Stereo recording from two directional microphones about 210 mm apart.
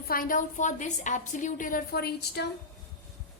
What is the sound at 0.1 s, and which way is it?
A woman's voice, 40° left (ahead or behind).